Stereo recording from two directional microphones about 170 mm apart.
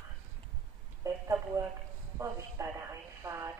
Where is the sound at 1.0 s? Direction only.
15° right (ahead or behind).